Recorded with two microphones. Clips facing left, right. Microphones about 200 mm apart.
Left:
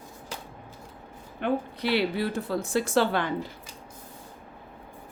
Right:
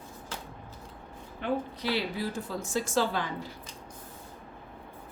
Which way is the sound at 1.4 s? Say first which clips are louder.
Left 4 dB; 65° left (ahead or behind).